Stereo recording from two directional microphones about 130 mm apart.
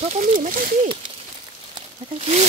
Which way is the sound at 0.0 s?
75° right (ahead or behind).